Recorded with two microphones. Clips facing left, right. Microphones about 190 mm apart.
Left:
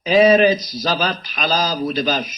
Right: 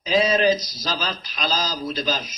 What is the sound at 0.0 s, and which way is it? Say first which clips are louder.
Speech: left 7 dB; 60° left (ahead or behind).